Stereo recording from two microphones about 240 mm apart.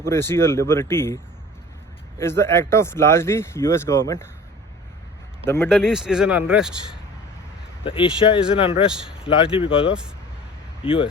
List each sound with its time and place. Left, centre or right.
0.0 s speech: centre
5.5 s speech: centre
5.7 s speech: centre
7.9 s speech: left
8.9 s speech: centre
9.2 s speech: left